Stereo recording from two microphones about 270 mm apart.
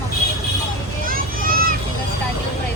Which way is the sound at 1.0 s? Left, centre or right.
Right.